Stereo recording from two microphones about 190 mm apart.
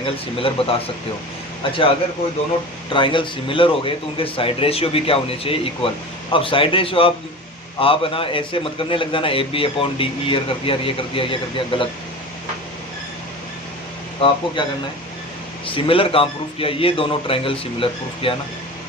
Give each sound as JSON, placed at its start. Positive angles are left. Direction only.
{"t": 0.0, "sound": "a man's voice", "side_deg": 30}
{"t": 2.9, "sound": "a man's voice", "side_deg": 25}
{"t": 14.2, "sound": "a man's voice", "side_deg": 30}